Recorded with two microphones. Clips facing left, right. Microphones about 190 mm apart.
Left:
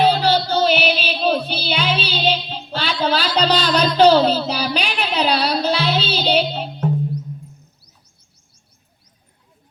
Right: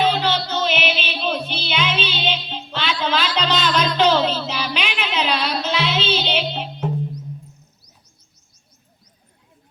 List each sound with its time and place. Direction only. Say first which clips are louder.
0.0 s child singing: left 4 dB; 35° left (ahead or behind)